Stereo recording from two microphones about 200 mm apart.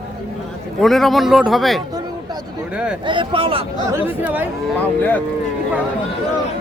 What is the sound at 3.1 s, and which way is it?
Speech, 25° right (ahead or behind).